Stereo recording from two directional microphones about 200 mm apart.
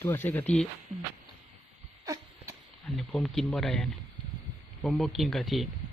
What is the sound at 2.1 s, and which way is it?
Wheeze, 15° right (ahead or behind).